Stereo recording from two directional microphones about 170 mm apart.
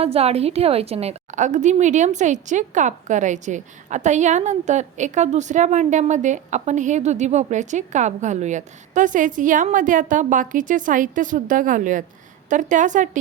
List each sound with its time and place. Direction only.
0.0 s a woman's voice: 35° right (ahead or behind)